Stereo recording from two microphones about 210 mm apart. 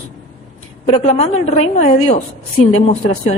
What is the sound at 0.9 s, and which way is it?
A woman's voice, 30° left (ahead or behind).